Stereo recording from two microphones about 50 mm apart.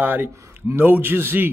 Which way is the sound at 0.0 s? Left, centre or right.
Right.